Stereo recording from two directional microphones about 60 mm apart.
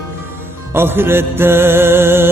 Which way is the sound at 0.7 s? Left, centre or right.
Right.